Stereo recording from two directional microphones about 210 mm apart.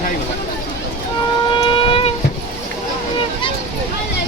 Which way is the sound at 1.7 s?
25° left (ahead or behind).